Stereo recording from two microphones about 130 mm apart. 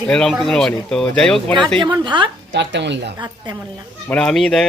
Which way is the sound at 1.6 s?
40° right (ahead or behind).